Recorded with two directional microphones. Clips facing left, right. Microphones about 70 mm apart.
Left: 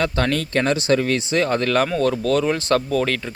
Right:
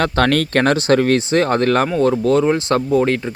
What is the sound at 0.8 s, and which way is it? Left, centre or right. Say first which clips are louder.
Speech: right 5 dB; right.